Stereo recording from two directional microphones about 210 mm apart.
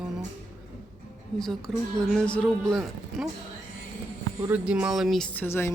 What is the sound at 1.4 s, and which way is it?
Speech, centre (ahead or behind).